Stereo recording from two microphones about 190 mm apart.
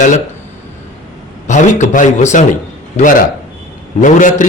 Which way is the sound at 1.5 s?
40° left (ahead or behind).